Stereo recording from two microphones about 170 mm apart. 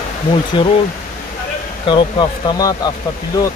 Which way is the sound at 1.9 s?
25° left (ahead or behind).